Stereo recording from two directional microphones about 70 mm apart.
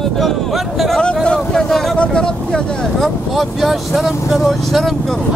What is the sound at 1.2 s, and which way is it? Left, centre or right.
Vehicle, centre.